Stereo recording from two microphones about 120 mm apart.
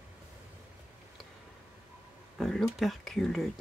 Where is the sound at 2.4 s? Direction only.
Centre (ahead or behind).